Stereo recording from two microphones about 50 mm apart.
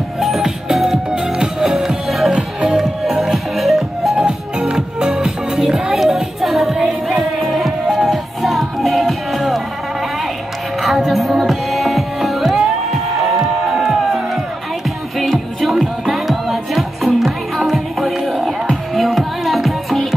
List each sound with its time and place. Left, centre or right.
0.2 s music: centre
2.3 s music: centre
2.8 s music: centre
10.8 s music: centre